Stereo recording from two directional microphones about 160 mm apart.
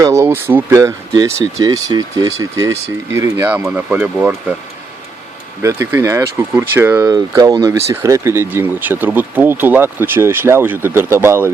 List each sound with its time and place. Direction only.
0.0 s speech: 15° right (ahead or behind)
5.6 s speech: 15° right (ahead or behind)